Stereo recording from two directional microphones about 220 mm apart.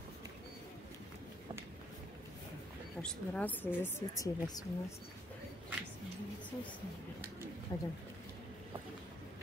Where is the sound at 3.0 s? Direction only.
5° left (ahead or behind).